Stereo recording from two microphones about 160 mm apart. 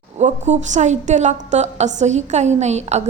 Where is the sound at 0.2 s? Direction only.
45° right (ahead or behind).